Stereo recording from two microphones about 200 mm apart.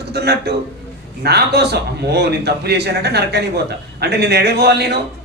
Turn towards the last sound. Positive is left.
turn(degrees=-55)  # may be behind; listen again after turning